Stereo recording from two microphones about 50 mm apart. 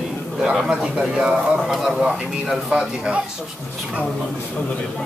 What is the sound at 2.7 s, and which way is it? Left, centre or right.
Speech, right.